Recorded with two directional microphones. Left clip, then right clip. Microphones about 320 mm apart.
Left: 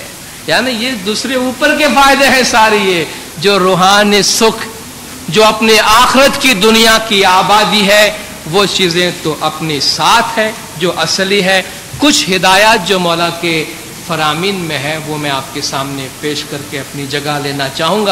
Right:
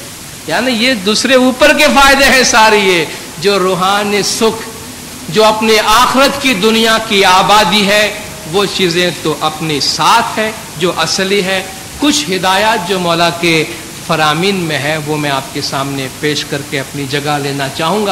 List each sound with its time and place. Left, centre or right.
0.7 s speech: centre
1.8 s a man's voice: centre
7.1 s a man's voice: centre
13.0 s a man's voice: centre